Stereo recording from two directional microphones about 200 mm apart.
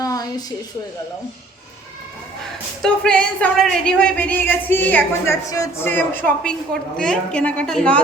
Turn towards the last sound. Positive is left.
turn(degrees=5)  # may be behind; listen again after turning